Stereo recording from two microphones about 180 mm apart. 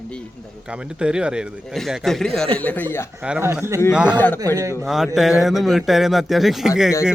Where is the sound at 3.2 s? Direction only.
10° right (ahead or behind).